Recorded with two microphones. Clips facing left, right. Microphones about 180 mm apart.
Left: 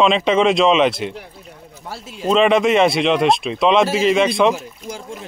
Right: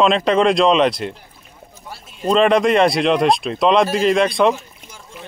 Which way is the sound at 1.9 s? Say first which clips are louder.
Left 6 dB; 90° left.